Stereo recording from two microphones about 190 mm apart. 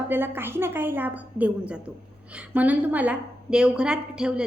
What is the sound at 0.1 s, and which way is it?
A woman's voice, 10° right (ahead or behind).